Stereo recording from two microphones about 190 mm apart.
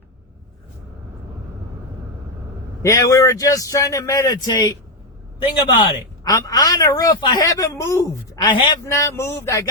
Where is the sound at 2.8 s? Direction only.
15° left (ahead or behind).